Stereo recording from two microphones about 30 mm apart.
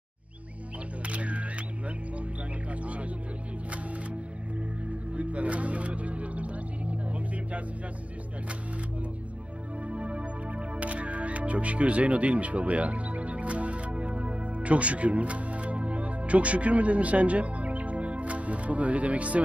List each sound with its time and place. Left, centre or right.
1.0 s hum: right
2.7 s music: right
9.8 s music: right